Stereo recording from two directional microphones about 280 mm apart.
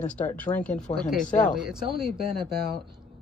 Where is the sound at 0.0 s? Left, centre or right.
Centre.